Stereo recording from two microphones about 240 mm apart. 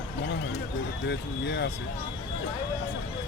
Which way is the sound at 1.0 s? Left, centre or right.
Left.